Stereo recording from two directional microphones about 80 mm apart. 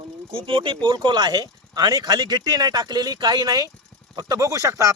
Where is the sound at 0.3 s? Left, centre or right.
Right.